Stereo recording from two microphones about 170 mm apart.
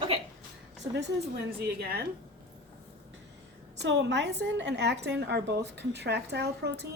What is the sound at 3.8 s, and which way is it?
A woman's voice, 90° right.